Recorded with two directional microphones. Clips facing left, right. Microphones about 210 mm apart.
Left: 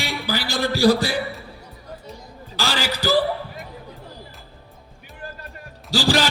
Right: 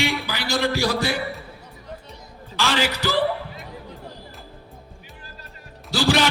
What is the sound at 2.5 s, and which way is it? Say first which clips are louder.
Music: right 2 dB; 35° left (ahead or behind).